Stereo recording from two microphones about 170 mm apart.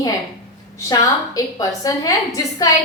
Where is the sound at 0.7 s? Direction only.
20° left (ahead or behind).